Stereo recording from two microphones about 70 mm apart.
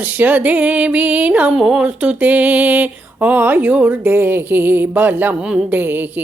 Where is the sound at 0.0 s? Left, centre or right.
Right.